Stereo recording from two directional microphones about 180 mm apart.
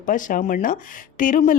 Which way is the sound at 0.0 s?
45° left (ahead or behind).